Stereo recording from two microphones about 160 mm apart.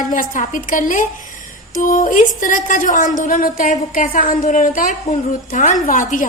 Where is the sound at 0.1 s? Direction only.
55° left (ahead or behind).